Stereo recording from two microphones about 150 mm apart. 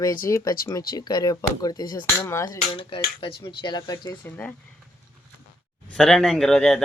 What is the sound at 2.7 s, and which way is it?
Dishes, 35° left (ahead or behind).